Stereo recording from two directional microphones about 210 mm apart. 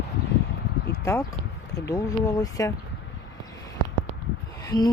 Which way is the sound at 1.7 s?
15° left (ahead or behind).